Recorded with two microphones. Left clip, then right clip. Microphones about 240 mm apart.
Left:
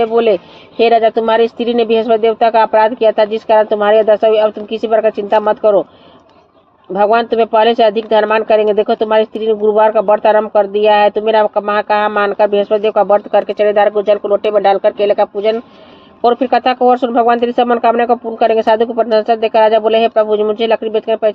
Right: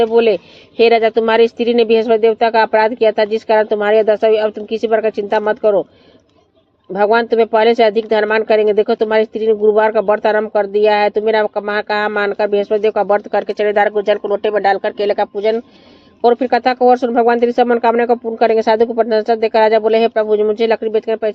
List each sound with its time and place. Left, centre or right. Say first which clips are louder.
0.0 s speech: left 1 dB; right
6.9 s speech: left 1 dB; right